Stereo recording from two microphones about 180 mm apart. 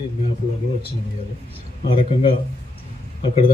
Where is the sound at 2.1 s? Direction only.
35° left (ahead or behind).